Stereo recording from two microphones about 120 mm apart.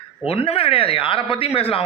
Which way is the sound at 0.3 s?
50° left (ahead or behind).